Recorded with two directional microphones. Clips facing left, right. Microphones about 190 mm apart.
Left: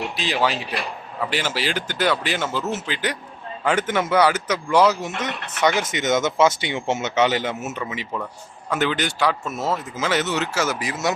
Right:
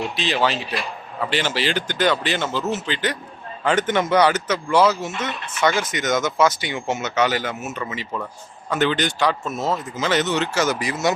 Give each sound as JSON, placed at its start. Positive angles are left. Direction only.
{"t": 0.2, "sound": "speech", "side_deg": 10}